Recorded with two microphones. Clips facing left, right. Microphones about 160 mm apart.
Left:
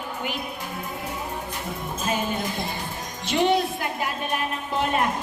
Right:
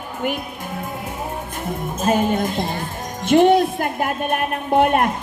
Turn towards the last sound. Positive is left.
turn(degrees=-55)  # may be behind; listen again after turning